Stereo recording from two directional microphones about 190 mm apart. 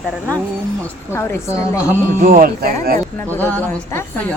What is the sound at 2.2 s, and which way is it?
Speech, 45° right (ahead or behind).